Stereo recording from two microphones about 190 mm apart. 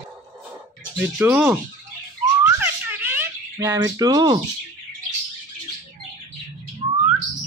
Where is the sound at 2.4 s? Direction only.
10° right (ahead or behind).